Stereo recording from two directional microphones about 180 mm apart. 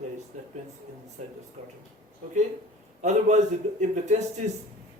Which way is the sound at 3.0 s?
40° right (ahead or behind).